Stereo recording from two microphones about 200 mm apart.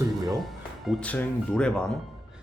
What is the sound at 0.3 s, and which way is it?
Speech, centre (ahead or behind).